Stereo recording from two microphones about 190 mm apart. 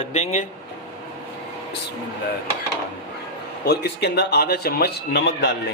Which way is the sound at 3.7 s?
60° left (ahead or behind).